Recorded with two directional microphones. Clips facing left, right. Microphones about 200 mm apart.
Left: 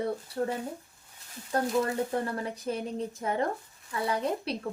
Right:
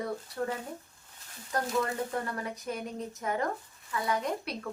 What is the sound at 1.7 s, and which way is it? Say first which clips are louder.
Speech: left 2 dB; 30° left (ahead or behind).